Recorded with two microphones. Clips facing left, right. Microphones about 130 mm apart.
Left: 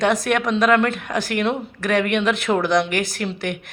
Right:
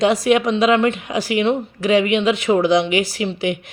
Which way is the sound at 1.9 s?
60° left (ahead or behind).